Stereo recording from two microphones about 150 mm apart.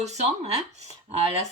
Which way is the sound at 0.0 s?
50° right (ahead or behind).